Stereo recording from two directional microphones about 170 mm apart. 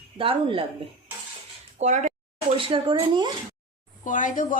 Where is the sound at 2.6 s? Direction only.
30° right (ahead or behind).